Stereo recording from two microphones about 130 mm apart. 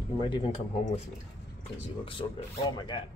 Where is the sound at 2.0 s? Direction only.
40° left (ahead or behind).